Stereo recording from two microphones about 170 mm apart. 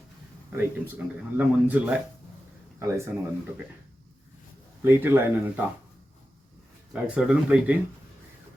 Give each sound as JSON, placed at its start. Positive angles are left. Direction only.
{"t": 0.5, "sound": "speech", "side_deg": -10}
{"t": 4.8, "sound": "speech", "side_deg": -10}
{"t": 6.9, "sound": "speech", "side_deg": -5}